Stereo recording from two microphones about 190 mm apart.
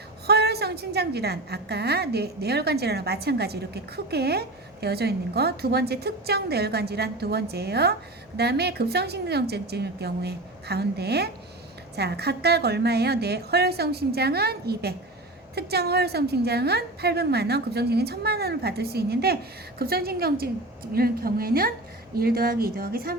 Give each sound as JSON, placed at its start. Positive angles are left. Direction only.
{"t": 0.3, "sound": "a woman's voice", "side_deg": -60}